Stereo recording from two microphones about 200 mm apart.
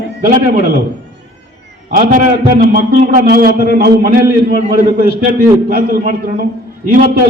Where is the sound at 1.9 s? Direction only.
45° right (ahead or behind).